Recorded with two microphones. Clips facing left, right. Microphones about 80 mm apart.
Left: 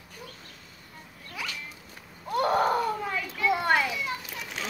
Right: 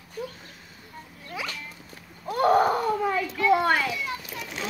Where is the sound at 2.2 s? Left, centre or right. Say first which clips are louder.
Right 4 dB; centre.